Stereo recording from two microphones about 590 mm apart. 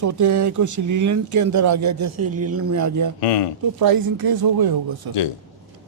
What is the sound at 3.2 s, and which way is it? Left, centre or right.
Speech, left.